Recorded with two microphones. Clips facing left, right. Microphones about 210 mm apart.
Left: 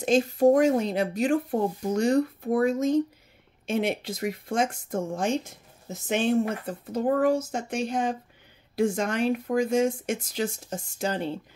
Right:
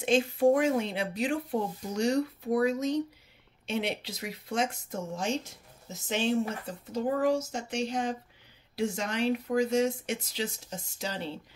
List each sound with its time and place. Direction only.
0.0 s speech: 40° left (ahead or behind)